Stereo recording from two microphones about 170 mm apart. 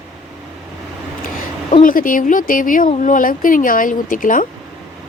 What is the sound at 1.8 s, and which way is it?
A woman's voice, 55° left (ahead or behind).